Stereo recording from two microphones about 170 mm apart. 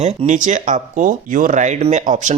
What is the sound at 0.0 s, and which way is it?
Speech, 45° right (ahead or behind).